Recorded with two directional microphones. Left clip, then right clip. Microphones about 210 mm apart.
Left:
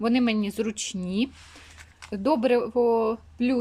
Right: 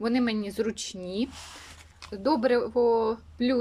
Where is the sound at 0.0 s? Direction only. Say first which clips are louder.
Left 3 dB; 10° left (ahead or behind).